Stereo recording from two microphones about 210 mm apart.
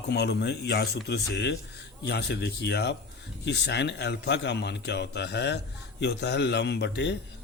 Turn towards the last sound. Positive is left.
turn(degrees=55)  # may be behind; listen again after turning